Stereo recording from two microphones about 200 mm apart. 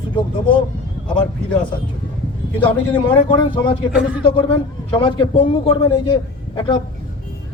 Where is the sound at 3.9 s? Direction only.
5° right (ahead or behind).